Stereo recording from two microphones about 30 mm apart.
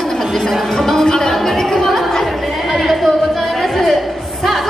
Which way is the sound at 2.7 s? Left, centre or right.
Centre.